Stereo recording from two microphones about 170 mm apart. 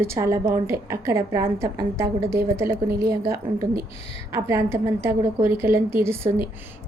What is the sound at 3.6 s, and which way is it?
Speech, 60° right (ahead or behind).